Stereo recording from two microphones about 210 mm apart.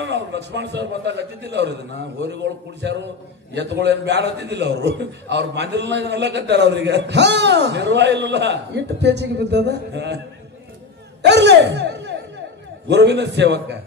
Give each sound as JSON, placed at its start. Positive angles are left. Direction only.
{"t": 0.0, "sound": "a man's voice", "side_deg": -55}
{"t": 3.5, "sound": "a man's voice", "side_deg": -55}
{"t": 11.2, "sound": "a man's voice", "side_deg": -55}